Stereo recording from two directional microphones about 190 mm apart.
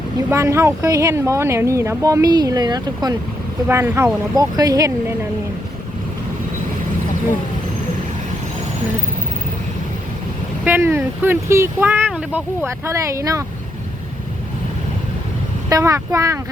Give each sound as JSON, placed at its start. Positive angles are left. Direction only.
{"t": 0.3, "sound": "speech", "side_deg": -15}
{"t": 10.6, "sound": "speech", "side_deg": -10}
{"t": 15.7, "sound": "speech", "side_deg": -20}